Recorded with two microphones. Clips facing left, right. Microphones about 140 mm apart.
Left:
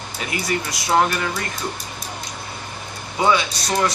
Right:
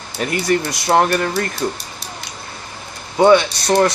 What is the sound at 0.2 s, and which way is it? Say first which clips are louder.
Speech: right 7 dB; 50° right (ahead or behind).